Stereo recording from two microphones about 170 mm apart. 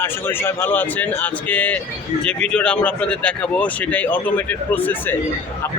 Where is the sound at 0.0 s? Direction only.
15° left (ahead or behind).